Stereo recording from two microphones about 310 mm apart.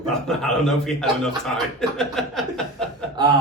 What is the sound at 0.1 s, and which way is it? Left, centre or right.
Speech, centre.